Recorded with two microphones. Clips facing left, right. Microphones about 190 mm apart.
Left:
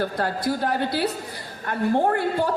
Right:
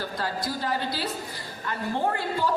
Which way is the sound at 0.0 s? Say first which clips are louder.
Left 6 dB; 60° left (ahead or behind).